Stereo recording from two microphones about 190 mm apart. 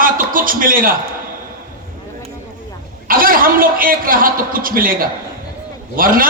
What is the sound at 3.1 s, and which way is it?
A man's voice, 50° right (ahead or behind).